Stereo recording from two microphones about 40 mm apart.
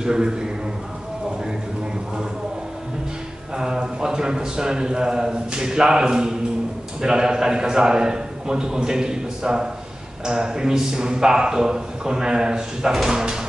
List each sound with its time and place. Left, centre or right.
0.0 s a man's voice: centre
3.5 s a man's voice: centre